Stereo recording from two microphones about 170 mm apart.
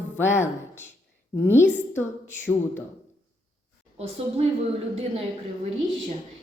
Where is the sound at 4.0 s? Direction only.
35° right (ahead or behind).